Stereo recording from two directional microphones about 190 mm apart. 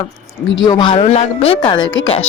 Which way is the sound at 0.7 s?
20° left (ahead or behind).